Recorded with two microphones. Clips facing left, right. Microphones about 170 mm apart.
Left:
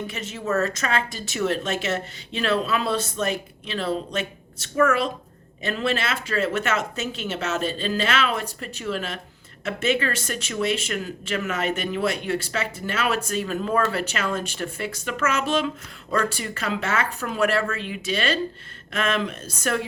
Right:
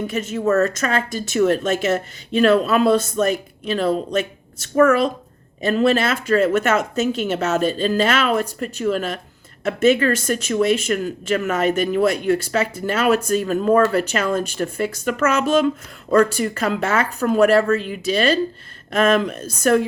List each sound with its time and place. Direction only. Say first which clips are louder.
0.1 s speech: right 9 dB; 45° right (ahead or behind)